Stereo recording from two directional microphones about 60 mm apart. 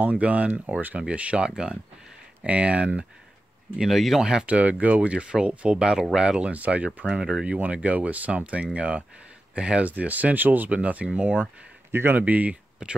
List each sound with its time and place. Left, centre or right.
0.0 s speech: right
3.7 s speech: centre
4.5 s speech: right
11.9 s speech: right